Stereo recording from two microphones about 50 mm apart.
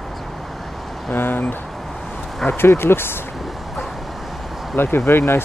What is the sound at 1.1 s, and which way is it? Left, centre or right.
Speech, left.